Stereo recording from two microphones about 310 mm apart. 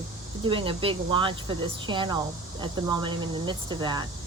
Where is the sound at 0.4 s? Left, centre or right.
Centre.